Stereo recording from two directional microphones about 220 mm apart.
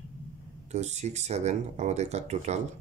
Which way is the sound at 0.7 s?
30° right (ahead or behind).